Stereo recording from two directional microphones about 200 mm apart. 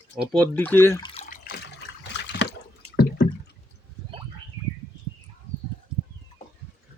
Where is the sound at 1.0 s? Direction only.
30° left (ahead or behind).